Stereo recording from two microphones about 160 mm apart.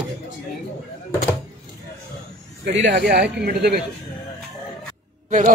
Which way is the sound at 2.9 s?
75° right (ahead or behind).